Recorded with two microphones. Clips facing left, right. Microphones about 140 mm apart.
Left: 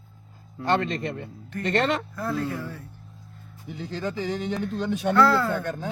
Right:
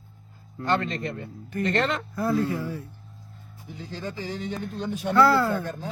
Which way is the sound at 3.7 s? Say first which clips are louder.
Left 4 dB; 70° left (ahead or behind).